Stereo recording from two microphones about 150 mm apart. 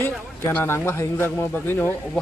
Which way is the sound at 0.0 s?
15° left (ahead or behind).